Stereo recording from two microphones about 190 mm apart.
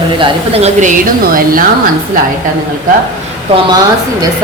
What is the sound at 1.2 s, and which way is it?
Speech, 50° right (ahead or behind).